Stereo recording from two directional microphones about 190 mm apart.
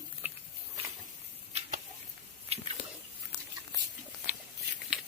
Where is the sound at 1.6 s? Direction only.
45° right (ahead or behind).